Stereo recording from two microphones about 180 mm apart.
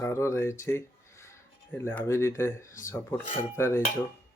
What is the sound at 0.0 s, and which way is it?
Speech, 15° left (ahead or behind).